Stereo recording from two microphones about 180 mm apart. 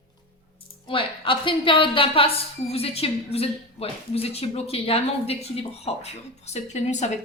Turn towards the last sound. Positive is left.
turn(degrees=40)  # may be behind; listen again after turning